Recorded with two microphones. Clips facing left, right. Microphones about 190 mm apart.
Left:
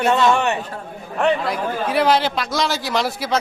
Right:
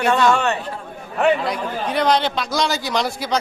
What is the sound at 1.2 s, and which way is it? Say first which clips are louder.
A man's voice: right 1 dB; centre (ahead or behind).